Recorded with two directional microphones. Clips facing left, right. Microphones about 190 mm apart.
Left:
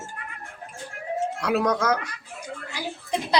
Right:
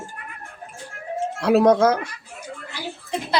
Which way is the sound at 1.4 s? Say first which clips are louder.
Right 9 dB; 30° right (ahead or behind).